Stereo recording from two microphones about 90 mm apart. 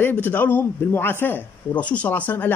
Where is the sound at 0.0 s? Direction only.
20° left (ahead or behind).